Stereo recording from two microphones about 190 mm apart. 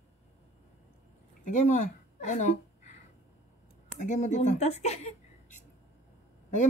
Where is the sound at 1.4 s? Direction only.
40° left (ahead or behind).